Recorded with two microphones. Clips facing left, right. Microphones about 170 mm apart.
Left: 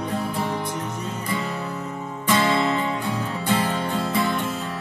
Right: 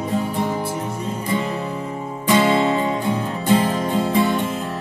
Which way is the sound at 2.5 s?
35° right (ahead or behind).